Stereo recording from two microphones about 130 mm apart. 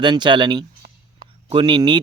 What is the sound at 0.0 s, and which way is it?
Speech, 35° right (ahead or behind).